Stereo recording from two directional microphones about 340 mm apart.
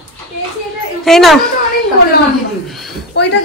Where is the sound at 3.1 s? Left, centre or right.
Left.